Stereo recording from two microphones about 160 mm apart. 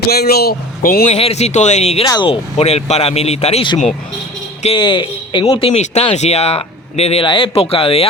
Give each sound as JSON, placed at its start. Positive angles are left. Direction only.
{"t": 0.1, "sound": "speech", "side_deg": 80}
{"t": 1.0, "sound": "speech", "side_deg": 40}
{"t": 2.0, "sound": "speech", "side_deg": 30}